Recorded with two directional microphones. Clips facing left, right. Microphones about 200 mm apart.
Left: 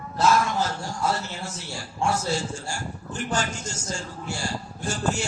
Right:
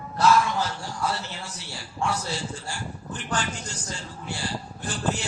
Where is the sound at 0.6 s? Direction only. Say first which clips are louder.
Left 2 dB; 45° left (ahead or behind).